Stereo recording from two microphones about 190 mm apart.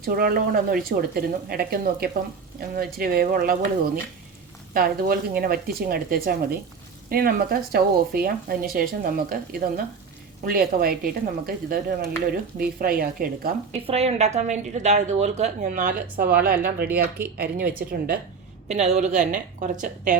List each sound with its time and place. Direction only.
0.0 s speech: 50° right (ahead or behind)
13.8 s a woman's voice: 35° right (ahead or behind); by 18.2 s 50° right (ahead or behind)
18.7 s a woman's voice: 35° right (ahead or behind)